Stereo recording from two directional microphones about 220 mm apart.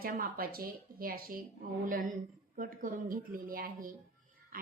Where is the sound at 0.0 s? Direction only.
40° right (ahead or behind).